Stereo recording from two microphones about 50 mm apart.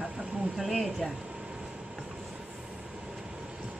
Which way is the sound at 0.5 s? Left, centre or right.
Centre.